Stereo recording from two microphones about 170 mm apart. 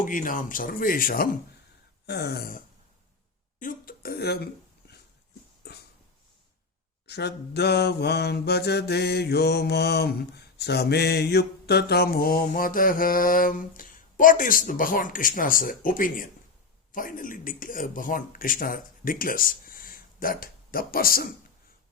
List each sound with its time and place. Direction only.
0.0 s speech: 50° left (ahead or behind)
2.0 s mantra: 75° left (ahead or behind); by 2.6 s 60° left (ahead or behind)
3.6 s speech: 55° left (ahead or behind)
5.6 s dog: 75° left (ahead or behind)
7.1 s mantra: 75° left (ahead or behind); by 16.3 s 55° left (ahead or behind)
16.9 s speech: 55° left (ahead or behind)